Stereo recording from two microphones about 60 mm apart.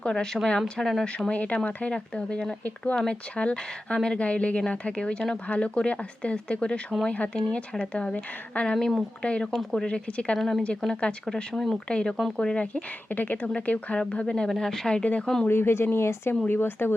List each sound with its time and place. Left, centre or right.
0.1 s a woman's voice: centre
1.3 s a woman's voice: left
8.7 s a woman's voice: centre
9.2 s speech: centre
9.5 s a woman's voice: centre
9.8 s speech: centre
10.3 s a woman's voice: centre
10.9 s a woman's voice: centre
12.6 s a woman's voice: left
15.4 s speech: left
16.5 s speech: left